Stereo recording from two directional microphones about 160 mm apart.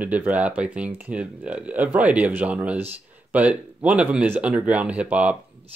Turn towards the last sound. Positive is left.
turn(degrees=-10)  # may be behind; listen again after turning